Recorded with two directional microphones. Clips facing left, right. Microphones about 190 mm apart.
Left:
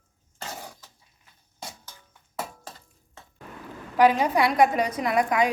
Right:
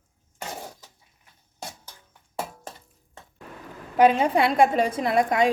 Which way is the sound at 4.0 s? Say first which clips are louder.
Right 1 dB; 25° right (ahead or behind).